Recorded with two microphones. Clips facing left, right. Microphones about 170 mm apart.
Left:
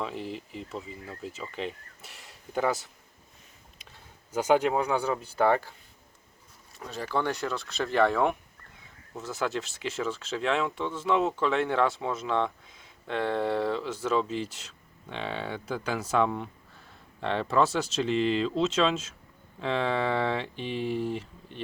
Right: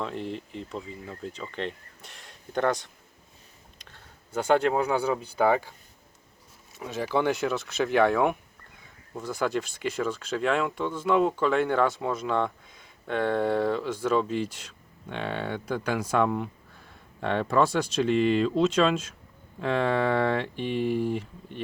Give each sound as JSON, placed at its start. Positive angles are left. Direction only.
{"t": 0.0, "sound": "speech", "side_deg": 0}
{"t": 3.8, "sound": "a sound", "side_deg": 5}
{"t": 4.8, "sound": "speech", "side_deg": -5}
{"t": 6.7, "sound": "speech", "side_deg": -5}
{"t": 7.3, "sound": "speech", "side_deg": -20}
{"t": 14.3, "sound": "speech", "side_deg": -10}